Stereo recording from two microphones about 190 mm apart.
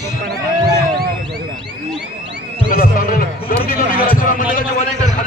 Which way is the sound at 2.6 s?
50° left (ahead or behind).